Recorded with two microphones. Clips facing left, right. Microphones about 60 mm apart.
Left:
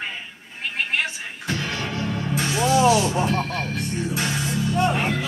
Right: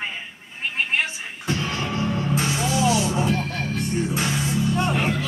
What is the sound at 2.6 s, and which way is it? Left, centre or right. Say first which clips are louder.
Music: left 7 dB; left.